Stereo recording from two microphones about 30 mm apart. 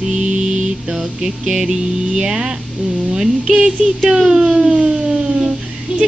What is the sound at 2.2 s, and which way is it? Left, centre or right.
Speech, right.